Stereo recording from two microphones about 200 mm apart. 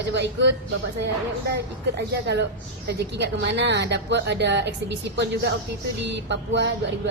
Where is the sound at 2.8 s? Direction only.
60° right (ahead or behind).